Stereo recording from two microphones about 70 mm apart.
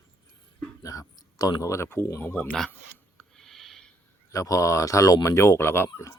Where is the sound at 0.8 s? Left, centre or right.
Left.